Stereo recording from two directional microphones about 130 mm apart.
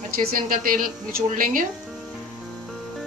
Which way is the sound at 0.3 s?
90° right.